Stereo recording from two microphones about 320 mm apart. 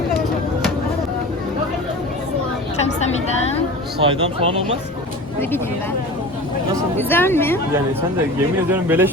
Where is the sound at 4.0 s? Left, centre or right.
Centre.